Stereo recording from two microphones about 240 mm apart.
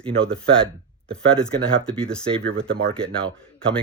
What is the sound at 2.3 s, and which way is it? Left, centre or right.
Speech, right.